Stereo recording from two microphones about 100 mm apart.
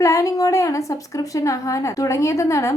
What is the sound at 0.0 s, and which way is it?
A woman's voice, 30° left (ahead or behind).